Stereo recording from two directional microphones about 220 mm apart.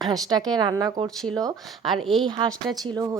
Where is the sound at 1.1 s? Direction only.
Centre (ahead or behind).